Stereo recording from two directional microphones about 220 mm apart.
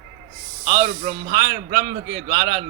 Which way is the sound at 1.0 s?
40° right (ahead or behind).